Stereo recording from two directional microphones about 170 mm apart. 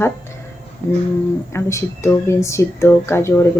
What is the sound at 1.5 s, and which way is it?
Speech, 15° left (ahead or behind).